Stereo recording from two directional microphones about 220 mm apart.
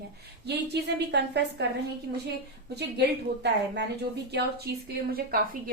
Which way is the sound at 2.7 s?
50° right (ahead or behind).